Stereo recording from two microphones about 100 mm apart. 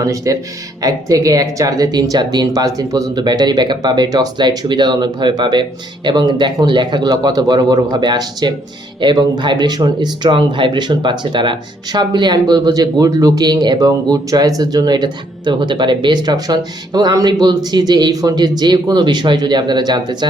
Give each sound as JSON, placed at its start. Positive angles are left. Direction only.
{"t": 0.0, "sound": "speech", "side_deg": -35}